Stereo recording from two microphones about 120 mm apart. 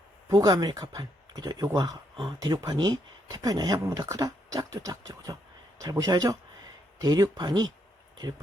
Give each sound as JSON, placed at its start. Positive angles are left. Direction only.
{"t": 0.3, "sound": "speech", "side_deg": -35}